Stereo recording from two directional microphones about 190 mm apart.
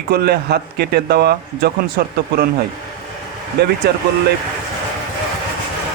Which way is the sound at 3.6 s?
60° right (ahead or behind).